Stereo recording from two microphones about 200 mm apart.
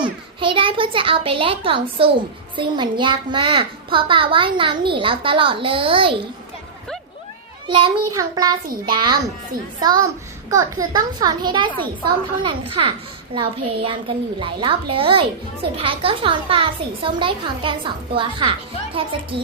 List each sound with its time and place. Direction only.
0.0 s a child's voice: 25° right (ahead or behind)
7.7 s a child's voice: 20° right (ahead or behind)